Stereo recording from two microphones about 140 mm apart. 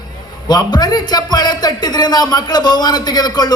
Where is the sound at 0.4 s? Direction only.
30° left (ahead or behind).